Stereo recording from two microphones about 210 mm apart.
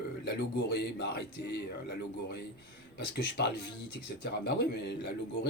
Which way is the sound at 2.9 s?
50° left (ahead or behind).